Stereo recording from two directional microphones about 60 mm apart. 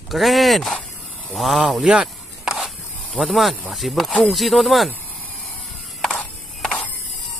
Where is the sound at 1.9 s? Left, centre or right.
Centre.